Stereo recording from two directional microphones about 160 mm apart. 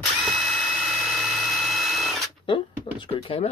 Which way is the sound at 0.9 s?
Centre (ahead or behind).